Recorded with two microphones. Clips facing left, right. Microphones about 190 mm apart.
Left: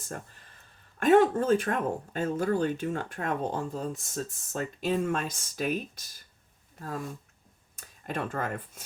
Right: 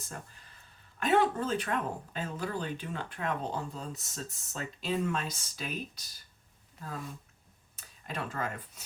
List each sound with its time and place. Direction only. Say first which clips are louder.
0.9 s speech: left 6 dB; 45° left (ahead or behind)